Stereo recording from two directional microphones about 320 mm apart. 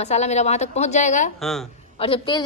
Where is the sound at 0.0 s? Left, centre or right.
Left.